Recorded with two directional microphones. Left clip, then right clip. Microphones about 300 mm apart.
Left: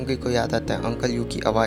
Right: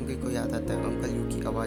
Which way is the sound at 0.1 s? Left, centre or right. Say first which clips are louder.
Left 10 dB; right.